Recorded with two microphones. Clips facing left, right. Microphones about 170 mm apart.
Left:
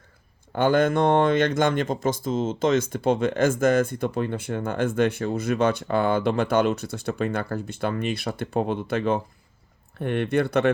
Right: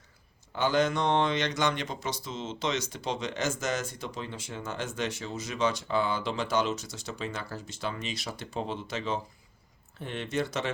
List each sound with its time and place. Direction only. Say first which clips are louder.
0.5 s speech: left 6 dB; 55° left (ahead or behind)